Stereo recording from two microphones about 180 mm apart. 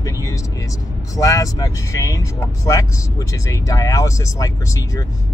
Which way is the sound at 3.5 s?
20° left (ahead or behind).